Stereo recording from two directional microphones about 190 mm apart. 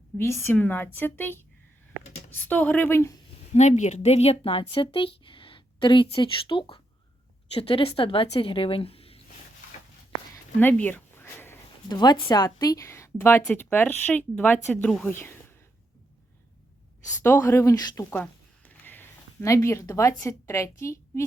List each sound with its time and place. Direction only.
0.2 s speech: 15° left (ahead or behind)
3.5 s a woman's voice: 40° left (ahead or behind)
10.6 s a sound: 10° left (ahead or behind)
11.9 s a woman's voice: 25° left (ahead or behind)
17.1 s speech: 10° left (ahead or behind)